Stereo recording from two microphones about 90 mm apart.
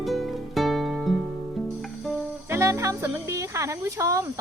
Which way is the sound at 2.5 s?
30° right (ahead or behind).